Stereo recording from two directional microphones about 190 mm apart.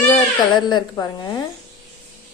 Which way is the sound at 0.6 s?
20° left (ahead or behind).